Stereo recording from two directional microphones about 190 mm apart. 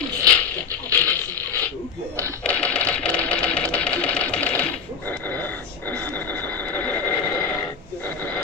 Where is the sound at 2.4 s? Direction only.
5° left (ahead or behind).